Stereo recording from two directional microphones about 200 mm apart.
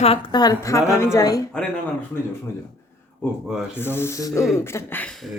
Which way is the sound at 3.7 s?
10° left (ahead or behind).